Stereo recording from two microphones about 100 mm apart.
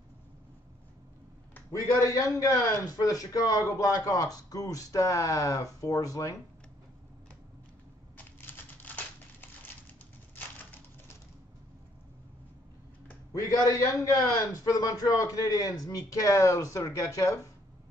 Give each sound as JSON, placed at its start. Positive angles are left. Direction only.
{"t": 1.7, "sound": "a man's voice", "side_deg": 35}
{"t": 8.2, "sound": "typing", "side_deg": 20}
{"t": 13.3, "sound": "a man's voice", "side_deg": 35}